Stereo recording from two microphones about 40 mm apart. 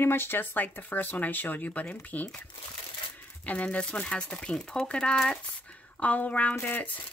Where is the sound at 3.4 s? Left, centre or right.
Left; by 5.3 s centre.